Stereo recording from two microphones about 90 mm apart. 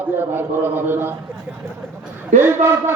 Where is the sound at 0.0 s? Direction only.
25° right (ahead or behind).